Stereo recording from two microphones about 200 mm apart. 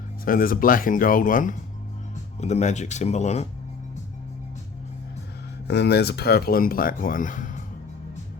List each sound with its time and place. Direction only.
0.3 s speech: 45° left (ahead or behind)
5.6 s speech: 55° left (ahead or behind); by 7.6 s 40° left (ahead or behind)